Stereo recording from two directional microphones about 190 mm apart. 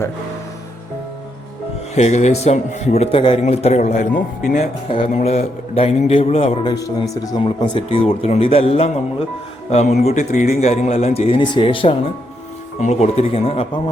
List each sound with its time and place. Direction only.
2.0 s a man's voice: 35° left (ahead or behind)
4.9 s a man's voice: 30° left (ahead or behind)